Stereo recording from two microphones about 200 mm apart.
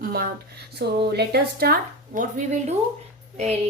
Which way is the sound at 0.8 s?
60° right (ahead or behind).